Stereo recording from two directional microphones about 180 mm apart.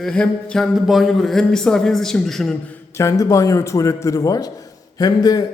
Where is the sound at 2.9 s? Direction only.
15° left (ahead or behind).